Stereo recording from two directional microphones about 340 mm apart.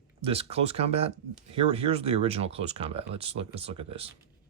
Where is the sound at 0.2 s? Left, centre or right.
Centre.